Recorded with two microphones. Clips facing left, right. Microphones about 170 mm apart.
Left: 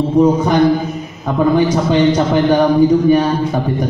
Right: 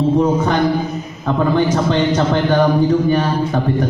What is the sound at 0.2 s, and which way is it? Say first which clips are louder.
A man's voice: left 4 dB; 10° left (ahead or behind).